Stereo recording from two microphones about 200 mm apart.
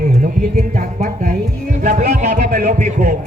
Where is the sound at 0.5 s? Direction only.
45° right (ahead or behind).